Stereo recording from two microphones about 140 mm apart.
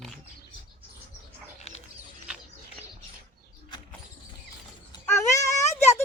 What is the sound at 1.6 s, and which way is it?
Bird, 50° left (ahead or behind).